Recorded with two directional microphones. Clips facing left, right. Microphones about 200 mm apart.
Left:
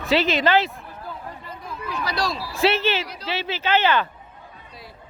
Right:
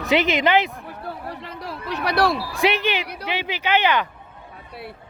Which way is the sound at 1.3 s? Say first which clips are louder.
Right 4 dB; 75° right (ahead or behind).